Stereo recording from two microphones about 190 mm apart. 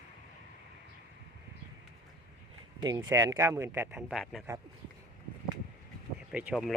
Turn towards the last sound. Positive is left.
turn(degrees=0)  # may be behind; listen again after turning